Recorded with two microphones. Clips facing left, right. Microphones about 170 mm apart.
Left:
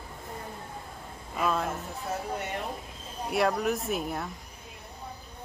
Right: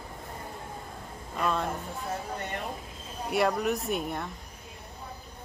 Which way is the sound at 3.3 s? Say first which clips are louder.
Even; centre (ahead or behind).